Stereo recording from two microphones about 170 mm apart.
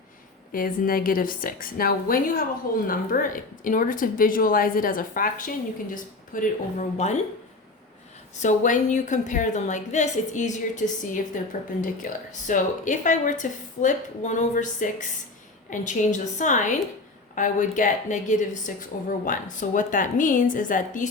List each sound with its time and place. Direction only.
0.5 s a woman's voice: 55° left (ahead or behind)
6.9 s speech: 40° left (ahead or behind)
8.4 s a woman's voice: 50° left (ahead or behind)